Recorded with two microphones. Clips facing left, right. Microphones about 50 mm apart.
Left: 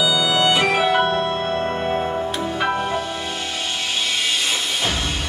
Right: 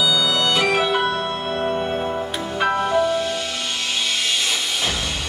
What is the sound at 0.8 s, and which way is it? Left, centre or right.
Music, left.